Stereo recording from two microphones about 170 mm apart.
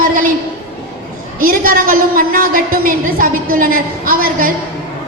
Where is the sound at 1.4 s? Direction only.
55° right (ahead or behind).